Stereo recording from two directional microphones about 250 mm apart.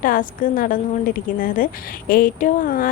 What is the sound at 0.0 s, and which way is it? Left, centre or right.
A woman's voice, left.